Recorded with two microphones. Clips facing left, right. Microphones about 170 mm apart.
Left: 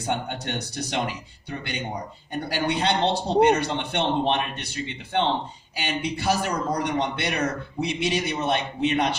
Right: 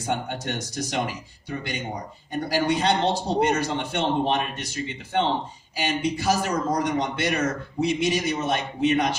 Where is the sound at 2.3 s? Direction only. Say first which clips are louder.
Right 3 dB; 60° left (ahead or behind).